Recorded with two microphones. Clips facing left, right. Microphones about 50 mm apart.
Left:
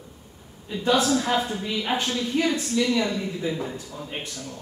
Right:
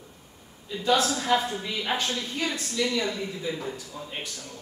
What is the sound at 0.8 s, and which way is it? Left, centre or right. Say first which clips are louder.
A woman's voice: left 2 dB; left.